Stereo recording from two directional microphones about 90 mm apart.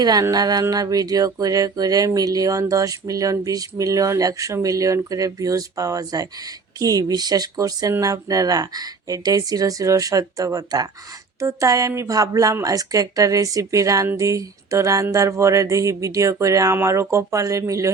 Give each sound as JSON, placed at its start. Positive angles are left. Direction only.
{"t": 0.0, "sound": "speech", "side_deg": -45}